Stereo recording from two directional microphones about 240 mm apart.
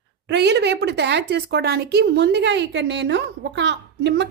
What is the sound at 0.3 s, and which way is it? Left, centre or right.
A woman's voice, right.